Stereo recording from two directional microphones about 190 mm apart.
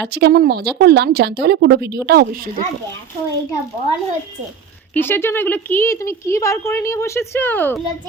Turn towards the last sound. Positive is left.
turn(degrees=10)  # may be behind; listen again after turning